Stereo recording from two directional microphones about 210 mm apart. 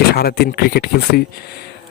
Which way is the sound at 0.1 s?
50° left (ahead or behind).